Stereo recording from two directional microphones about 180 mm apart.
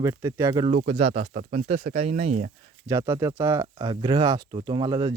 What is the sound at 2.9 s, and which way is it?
Speech, 15° right (ahead or behind).